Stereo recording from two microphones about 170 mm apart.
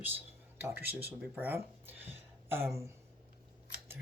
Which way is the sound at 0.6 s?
10° right (ahead or behind).